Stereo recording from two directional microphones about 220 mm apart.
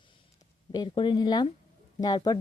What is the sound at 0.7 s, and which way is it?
Speech, 20° left (ahead or behind).